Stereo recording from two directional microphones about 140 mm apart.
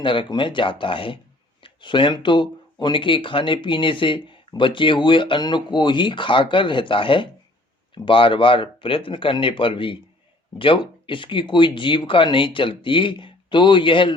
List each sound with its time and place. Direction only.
0.0 s speech: 35° left (ahead or behind)
1.6 s a sound: 35° left (ahead or behind)
2.2 s speech: 35° left (ahead or behind)